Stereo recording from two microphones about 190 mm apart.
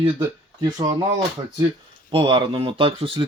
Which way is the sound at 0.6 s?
20° right (ahead or behind).